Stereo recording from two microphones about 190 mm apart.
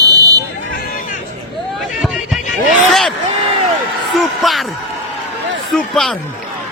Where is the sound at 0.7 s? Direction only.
60° left (ahead or behind).